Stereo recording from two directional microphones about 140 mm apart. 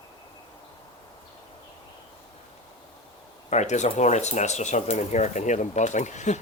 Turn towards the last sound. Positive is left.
turn(degrees=60)  # may be behind; listen again after turning